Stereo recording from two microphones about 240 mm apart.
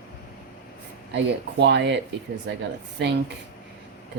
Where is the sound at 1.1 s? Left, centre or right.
Right.